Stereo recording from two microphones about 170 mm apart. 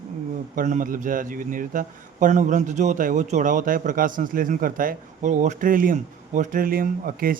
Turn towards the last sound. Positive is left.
turn(degrees=-55)  # may be behind; listen again after turning